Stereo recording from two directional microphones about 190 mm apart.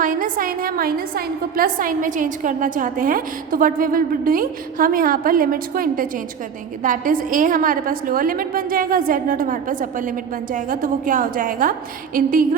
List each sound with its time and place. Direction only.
0.0 s a woman's voice: 45° right (ahead or behind)